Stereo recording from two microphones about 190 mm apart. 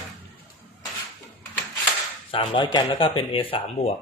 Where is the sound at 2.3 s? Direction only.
25° left (ahead or behind).